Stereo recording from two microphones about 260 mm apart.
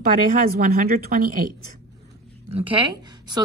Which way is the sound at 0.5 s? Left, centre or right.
Right.